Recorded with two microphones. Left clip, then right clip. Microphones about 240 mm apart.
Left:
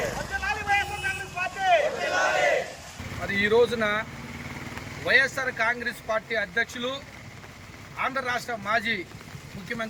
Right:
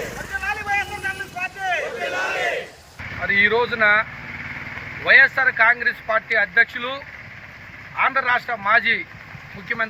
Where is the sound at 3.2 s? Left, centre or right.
Centre.